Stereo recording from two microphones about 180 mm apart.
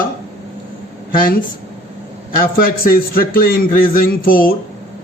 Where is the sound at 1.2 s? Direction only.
50° left (ahead or behind).